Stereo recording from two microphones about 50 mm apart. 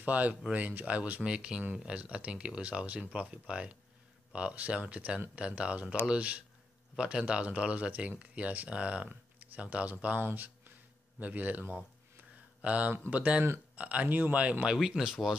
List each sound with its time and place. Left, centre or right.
0.0 s speech: right
1.2 s speech: centre
12.6 s speech: right
14.7 s speech: centre